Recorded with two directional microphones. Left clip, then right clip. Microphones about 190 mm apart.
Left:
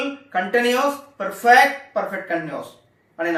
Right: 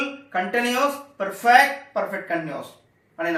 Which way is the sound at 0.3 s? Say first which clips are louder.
Left 5 dB; 5° right (ahead or behind).